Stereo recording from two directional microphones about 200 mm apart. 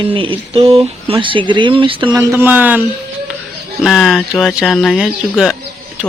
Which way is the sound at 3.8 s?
Centre (ahead or behind).